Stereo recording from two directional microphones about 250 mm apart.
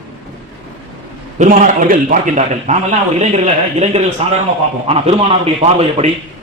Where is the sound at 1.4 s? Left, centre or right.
Right.